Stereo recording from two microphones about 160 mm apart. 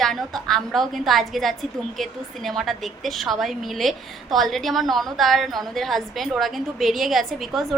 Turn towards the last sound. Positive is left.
turn(degrees=0)  # may be behind; listen again after turning